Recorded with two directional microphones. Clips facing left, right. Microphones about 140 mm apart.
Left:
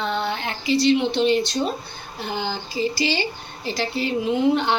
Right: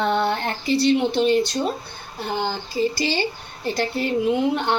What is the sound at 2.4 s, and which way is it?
Speech, 50° right (ahead or behind).